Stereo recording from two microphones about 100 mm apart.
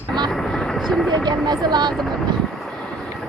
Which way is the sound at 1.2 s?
45° right (ahead or behind).